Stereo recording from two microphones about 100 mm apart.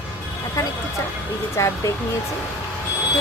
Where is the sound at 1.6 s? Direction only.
30° left (ahead or behind).